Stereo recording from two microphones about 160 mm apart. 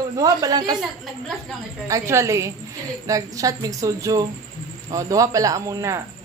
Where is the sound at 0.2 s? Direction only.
25° right (ahead or behind).